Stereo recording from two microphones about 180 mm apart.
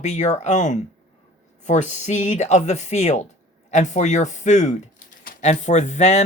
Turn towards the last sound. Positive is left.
turn(degrees=40)  # may be behind; listen again after turning